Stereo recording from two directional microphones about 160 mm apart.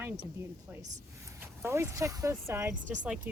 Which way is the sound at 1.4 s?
15° right (ahead or behind).